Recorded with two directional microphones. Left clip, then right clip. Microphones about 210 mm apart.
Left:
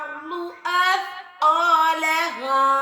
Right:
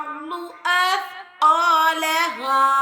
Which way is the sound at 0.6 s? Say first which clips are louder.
Right 1 dB; 55° right (ahead or behind).